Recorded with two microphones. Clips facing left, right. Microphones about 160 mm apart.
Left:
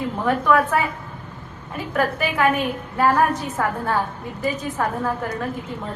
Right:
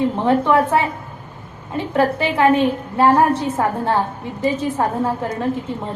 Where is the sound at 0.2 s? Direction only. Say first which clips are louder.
Right 1 dB; 25° right (ahead or behind).